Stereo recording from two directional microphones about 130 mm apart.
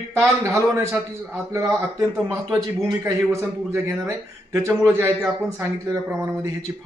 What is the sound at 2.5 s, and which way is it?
A man's voice, 25° right (ahead or behind).